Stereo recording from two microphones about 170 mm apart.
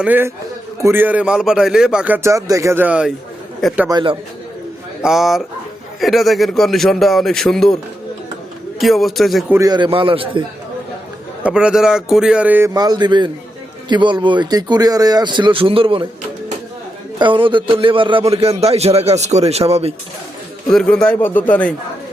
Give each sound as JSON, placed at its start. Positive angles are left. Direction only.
{"t": 0.0, "sound": "speech", "side_deg": -10}
{"t": 3.8, "sound": "speech", "side_deg": -25}
{"t": 5.0, "sound": "a man's voice", "side_deg": 0}
{"t": 8.8, "sound": "a man's voice", "side_deg": 0}
{"t": 9.6, "sound": "speech", "side_deg": -25}
{"t": 11.4, "sound": "a man's voice", "side_deg": -5}
{"t": 12.7, "sound": "speech", "side_deg": -25}
{"t": 17.2, "sound": "a man's voice", "side_deg": -30}
{"t": 20.7, "sound": "speech", "side_deg": 5}